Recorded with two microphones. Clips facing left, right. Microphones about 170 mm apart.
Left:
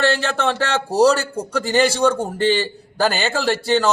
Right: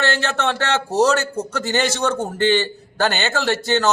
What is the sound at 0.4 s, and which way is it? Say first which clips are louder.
A man's voice: left 1 dB; 35° left (ahead or behind).